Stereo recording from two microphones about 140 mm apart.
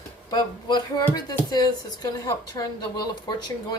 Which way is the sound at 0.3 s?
30° left (ahead or behind).